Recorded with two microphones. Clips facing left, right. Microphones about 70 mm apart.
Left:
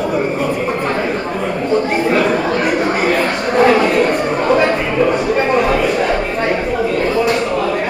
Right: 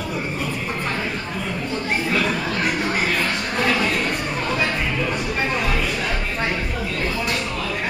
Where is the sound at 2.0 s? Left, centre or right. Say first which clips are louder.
Left 8 dB; left.